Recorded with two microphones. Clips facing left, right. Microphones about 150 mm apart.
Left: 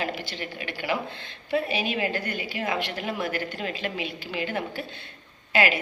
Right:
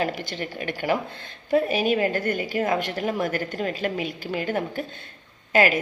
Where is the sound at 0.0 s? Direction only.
45° right (ahead or behind).